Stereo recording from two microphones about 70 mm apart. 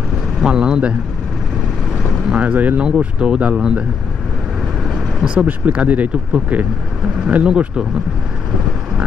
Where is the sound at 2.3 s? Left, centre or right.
Centre.